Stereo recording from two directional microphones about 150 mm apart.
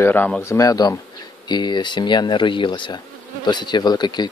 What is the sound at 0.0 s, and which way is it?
Speech, 10° left (ahead or behind).